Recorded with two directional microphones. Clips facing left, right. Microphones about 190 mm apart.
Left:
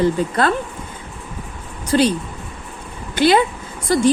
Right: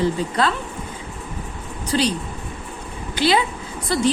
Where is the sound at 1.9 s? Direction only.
55° left (ahead or behind).